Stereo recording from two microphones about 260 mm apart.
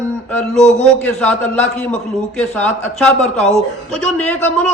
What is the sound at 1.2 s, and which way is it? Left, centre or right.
A man's voice, centre.